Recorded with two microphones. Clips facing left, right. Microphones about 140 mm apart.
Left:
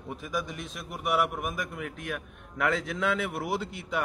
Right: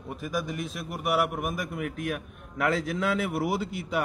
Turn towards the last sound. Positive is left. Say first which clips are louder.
# right 2 dB
turn(degrees=-10)  # may be behind; listen again after turning